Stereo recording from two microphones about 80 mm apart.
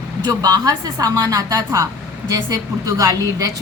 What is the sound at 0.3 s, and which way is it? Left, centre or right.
A woman's voice, right.